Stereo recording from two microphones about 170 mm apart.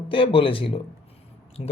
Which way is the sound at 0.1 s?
30° left (ahead or behind).